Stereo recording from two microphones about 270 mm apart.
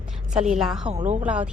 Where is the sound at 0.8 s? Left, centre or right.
Right.